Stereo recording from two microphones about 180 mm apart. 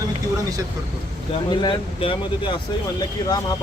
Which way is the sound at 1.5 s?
25° left (ahead or behind).